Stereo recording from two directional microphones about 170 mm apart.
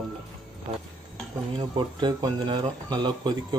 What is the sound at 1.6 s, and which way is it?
Speech, 30° right (ahead or behind).